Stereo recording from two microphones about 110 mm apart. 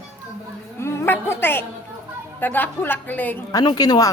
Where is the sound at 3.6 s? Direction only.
40° left (ahead or behind).